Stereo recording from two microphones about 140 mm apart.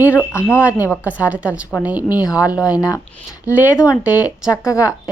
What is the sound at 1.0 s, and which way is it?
A woman's voice, 10° right (ahead or behind).